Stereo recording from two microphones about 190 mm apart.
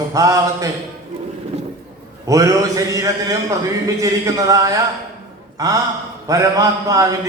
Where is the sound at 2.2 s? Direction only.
15° right (ahead or behind).